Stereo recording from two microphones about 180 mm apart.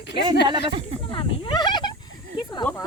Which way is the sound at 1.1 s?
25° left (ahead or behind).